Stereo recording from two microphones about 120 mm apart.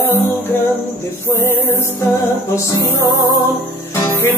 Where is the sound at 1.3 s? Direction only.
25° left (ahead or behind).